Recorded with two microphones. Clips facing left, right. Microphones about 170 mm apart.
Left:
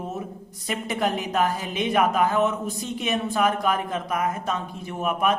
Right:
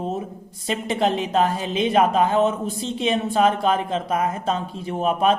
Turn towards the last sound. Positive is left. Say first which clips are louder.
# right 4 dB
turn(degrees=-30)  # may be behind; listen again after turning